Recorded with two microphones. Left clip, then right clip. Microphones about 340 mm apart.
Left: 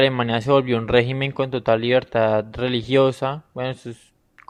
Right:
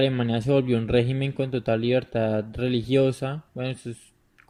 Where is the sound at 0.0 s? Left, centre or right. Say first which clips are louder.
Left 6 dB; left.